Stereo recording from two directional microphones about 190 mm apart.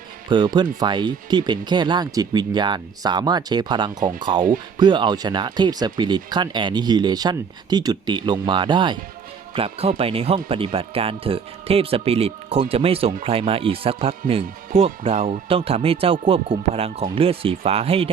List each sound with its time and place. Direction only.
0.3 s speech: 25° right (ahead or behind)
15.1 s speech: 45° right (ahead or behind)
15.4 s speech: 30° right (ahead or behind)